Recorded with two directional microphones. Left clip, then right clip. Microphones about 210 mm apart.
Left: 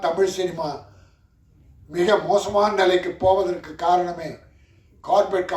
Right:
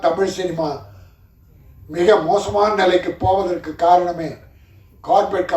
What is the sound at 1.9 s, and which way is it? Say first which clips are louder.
Speech: right 4 dB; 55° left (ahead or behind).